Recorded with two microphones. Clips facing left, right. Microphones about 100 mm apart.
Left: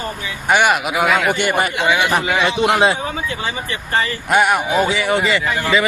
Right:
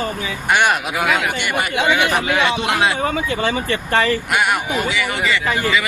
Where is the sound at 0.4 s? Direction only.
10° left (ahead or behind).